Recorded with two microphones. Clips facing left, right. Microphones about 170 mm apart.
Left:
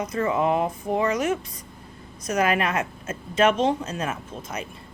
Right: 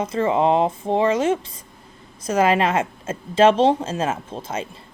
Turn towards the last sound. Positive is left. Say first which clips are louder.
# right 5 dB
turn(degrees=-30)  # may be behind; listen again after turning